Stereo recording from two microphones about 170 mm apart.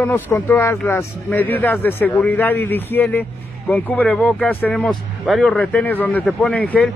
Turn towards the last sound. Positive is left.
turn(degrees=10)  # may be behind; listen again after turning